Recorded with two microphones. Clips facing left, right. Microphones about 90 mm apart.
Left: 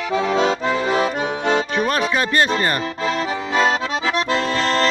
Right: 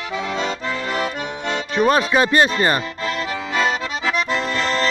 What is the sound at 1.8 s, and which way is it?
Music, 5° right (ahead or behind).